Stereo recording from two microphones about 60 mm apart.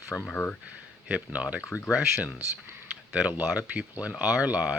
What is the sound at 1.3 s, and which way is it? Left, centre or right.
Speech, right.